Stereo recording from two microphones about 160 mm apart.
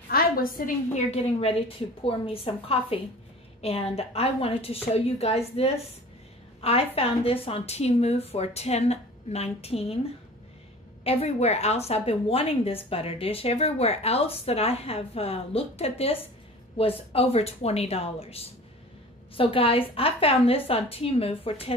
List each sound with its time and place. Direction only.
0.1 s a woman's voice: 65° left (ahead or behind)
1.1 s speech: 40° left (ahead or behind)
11.1 s speech: 40° left (ahead or behind)